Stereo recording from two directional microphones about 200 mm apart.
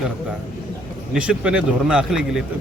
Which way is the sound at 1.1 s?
5° right (ahead or behind).